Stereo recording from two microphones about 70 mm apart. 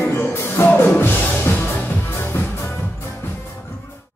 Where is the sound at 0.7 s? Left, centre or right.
Left.